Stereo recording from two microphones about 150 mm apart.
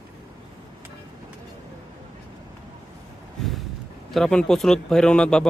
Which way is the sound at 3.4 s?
5° left (ahead or behind).